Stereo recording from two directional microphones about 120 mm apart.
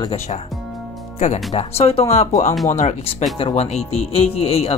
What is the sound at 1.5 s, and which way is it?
Speech, 60° left (ahead or behind).